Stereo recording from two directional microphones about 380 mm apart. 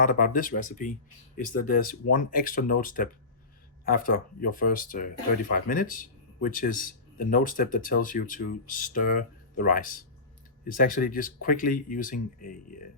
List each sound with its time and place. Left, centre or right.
0.0 s speech: left